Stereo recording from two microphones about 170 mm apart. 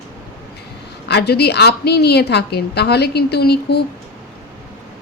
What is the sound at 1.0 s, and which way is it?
A woman's voice, 75° left (ahead or behind).